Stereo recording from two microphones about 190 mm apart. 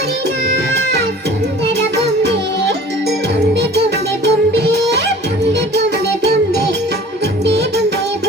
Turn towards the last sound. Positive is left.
turn(degrees=-65)  # may be behind; listen again after turning